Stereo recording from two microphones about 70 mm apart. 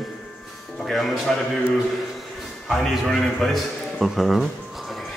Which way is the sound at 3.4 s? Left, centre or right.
Centre.